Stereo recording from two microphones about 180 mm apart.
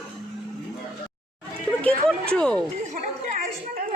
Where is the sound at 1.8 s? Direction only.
5° left (ahead or behind).